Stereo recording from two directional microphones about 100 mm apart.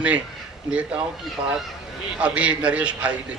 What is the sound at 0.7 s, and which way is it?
Speech, 10° right (ahead or behind).